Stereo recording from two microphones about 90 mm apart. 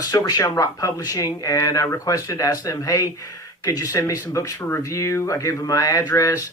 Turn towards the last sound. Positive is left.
turn(degrees=35)  # may be behind; listen again after turning